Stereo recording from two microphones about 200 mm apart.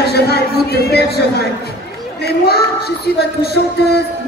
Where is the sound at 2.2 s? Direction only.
55° left (ahead or behind).